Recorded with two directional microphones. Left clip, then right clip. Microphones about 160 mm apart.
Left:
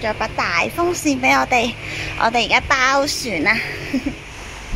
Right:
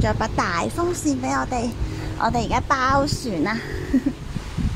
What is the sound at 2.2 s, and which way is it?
A woman's voice, 15° right (ahead or behind).